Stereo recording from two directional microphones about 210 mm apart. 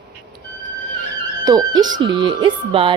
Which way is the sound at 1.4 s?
20° right (ahead or behind).